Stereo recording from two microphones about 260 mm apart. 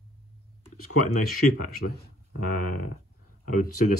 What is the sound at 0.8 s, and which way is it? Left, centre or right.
Speech, left.